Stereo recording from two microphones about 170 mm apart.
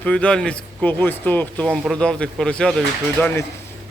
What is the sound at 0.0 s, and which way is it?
Speech, 5° left (ahead or behind).